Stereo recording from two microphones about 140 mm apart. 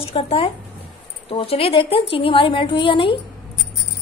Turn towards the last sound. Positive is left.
turn(degrees=35)  # may be behind; listen again after turning